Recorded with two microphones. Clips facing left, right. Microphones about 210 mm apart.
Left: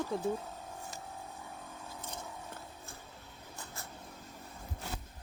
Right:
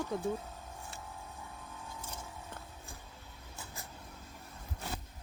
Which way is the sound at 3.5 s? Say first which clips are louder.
Left 1 dB; 10° right (ahead or behind).